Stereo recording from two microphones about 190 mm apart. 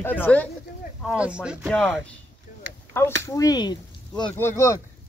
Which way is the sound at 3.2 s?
20° left (ahead or behind).